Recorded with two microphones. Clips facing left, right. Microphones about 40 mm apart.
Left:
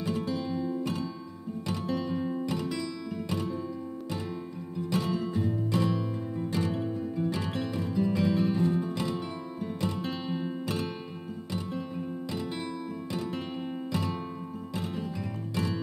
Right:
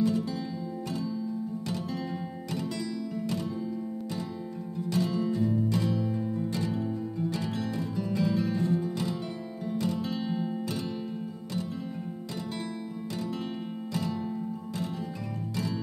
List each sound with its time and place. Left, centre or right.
0.0 s music: left
4.9 s music: left
7.3 s music: left